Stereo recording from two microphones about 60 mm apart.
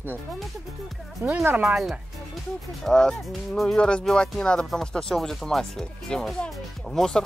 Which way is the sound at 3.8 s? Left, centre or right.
Centre.